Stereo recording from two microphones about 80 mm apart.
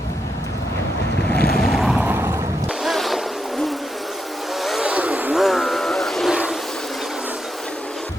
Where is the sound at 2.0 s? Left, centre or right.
Right.